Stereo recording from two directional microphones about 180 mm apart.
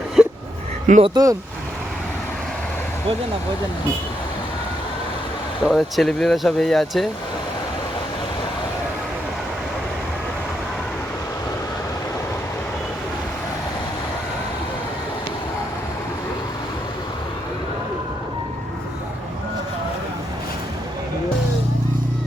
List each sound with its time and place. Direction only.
0.2 s a sound: centre (ahead or behind)
0.9 s speech: 40° right (ahead or behind)
1.1 s speech: 20° right (ahead or behind)
5.6 s speech: centre (ahead or behind)